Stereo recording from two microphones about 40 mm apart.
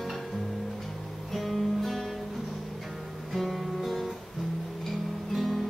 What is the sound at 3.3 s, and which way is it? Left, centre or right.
Music, centre.